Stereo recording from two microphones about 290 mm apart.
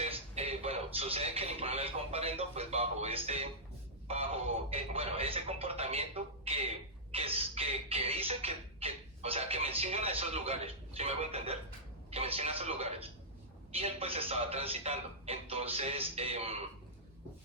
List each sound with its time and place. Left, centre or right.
0.0 s speech: right